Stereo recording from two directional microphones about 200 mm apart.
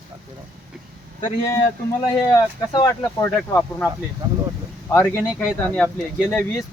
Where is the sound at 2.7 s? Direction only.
20° left (ahead or behind).